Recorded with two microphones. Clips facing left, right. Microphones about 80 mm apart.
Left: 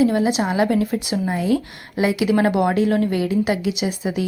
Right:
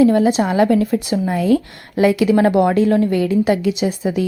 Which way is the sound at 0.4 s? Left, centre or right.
Centre.